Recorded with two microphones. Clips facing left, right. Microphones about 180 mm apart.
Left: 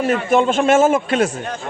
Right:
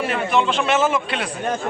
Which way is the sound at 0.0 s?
45° left (ahead or behind).